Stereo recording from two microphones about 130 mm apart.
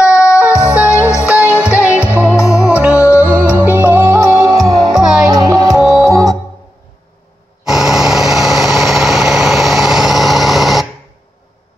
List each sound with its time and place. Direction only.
0.1 s music: 25° left (ahead or behind)
0.7 s music: 10° right (ahead or behind); by 4.9 s 25° right (ahead or behind)
4.9 s music: 5° right (ahead or behind)
5.3 s music: 25° right (ahead or behind)
5.8 s music: centre (ahead or behind)
6.0 s music: 25° right (ahead or behind)
7.6 s vehicle: 5° right (ahead or behind)